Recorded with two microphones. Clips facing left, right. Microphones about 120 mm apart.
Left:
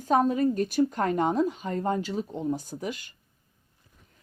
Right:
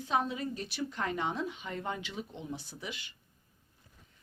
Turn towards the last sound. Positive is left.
turn(degrees=45)  # may be behind; listen again after turning